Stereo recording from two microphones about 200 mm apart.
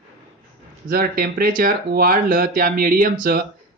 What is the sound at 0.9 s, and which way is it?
Speech, 50° right (ahead or behind).